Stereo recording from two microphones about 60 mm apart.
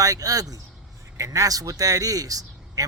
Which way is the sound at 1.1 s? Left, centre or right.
Right.